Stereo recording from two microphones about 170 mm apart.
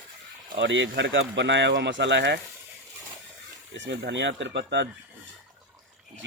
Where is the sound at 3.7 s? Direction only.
90° right.